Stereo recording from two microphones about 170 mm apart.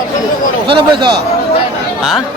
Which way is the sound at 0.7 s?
30° right (ahead or behind).